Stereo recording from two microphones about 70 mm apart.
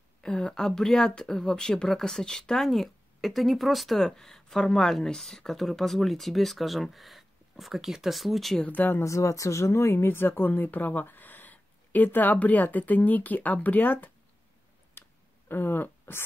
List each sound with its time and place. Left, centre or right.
0.2 s speech: centre
8.5 s speech: left
9.0 s speech: left
15.0 s a sound: left